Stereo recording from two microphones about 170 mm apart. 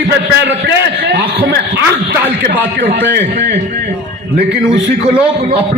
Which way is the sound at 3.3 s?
80° right.